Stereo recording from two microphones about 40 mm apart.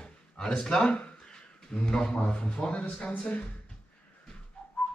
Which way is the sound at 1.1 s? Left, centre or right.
Centre.